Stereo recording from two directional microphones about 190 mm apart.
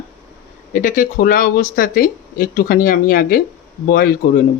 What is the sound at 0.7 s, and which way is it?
Speech, 45° left (ahead or behind).